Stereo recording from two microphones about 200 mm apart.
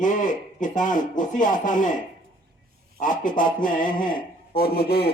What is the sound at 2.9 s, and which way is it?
Speech, 40° left (ahead or behind).